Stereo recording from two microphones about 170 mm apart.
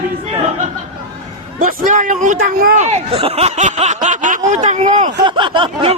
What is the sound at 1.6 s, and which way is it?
Speech, 50° right (ahead or behind).